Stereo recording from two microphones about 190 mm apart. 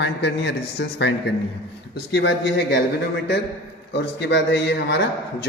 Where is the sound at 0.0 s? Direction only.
65° left (ahead or behind).